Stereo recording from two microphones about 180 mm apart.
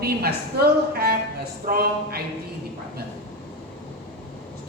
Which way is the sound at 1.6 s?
55° right (ahead or behind).